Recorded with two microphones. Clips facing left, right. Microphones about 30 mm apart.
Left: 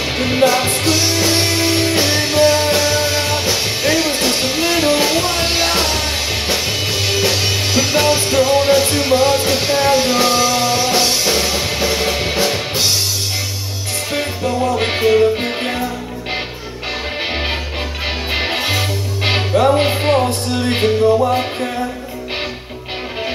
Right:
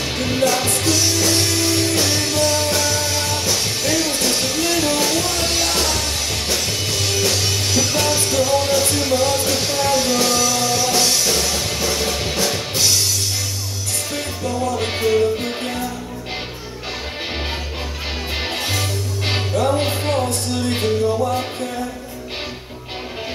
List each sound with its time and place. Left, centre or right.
0.0 s music: left
14.1 s music: left
18.3 s music: left